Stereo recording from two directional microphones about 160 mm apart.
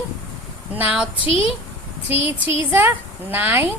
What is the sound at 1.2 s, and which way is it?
Speech, 35° left (ahead or behind).